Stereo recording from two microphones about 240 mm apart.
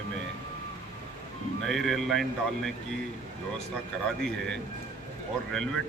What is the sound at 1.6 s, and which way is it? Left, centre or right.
Speech, centre.